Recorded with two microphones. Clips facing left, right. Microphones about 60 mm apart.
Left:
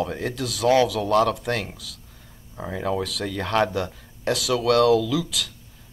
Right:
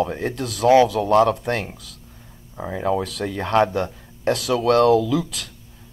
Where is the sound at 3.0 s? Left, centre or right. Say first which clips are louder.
Right 2 dB; right.